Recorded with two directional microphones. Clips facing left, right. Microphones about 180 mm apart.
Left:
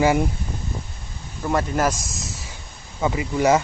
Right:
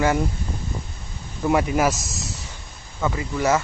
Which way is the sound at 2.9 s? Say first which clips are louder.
Left 3 dB; 15° left (ahead or behind).